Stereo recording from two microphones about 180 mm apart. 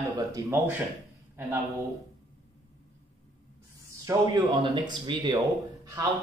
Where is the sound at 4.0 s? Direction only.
25° right (ahead or behind).